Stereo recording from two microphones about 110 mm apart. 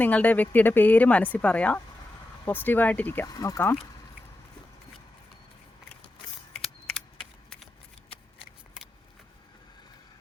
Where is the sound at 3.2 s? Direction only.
30° left (ahead or behind).